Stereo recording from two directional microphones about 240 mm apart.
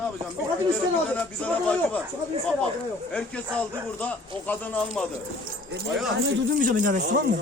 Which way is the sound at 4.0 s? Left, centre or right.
Centre.